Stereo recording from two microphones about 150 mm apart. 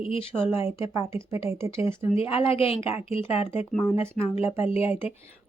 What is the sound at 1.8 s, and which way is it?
Speech, 40° left (ahead or behind).